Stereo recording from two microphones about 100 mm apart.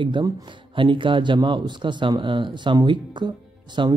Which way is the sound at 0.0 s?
55° right (ahead or behind).